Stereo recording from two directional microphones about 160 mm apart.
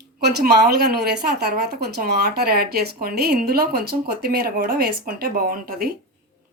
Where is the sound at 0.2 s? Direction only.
90° right; by 5.9 s 65° right (ahead or behind).